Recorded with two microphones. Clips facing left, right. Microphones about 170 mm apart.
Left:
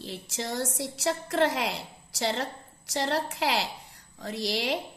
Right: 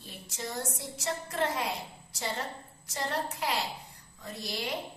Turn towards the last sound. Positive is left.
turn(degrees=85)